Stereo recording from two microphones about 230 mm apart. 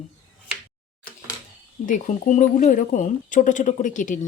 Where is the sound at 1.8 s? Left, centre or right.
Left.